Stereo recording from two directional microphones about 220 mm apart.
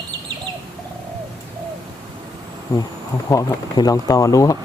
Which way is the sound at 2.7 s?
15° left (ahead or behind).